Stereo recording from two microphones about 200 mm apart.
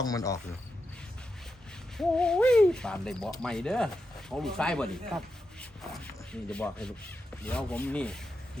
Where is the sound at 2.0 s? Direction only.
5° left (ahead or behind).